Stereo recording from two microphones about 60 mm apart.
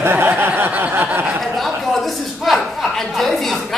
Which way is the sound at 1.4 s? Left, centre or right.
Centre.